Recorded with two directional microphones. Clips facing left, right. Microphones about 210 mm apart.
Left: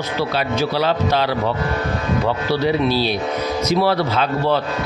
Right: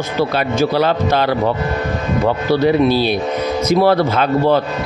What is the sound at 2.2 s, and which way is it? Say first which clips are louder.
A man's voice: right 6 dB; 50° right (ahead or behind).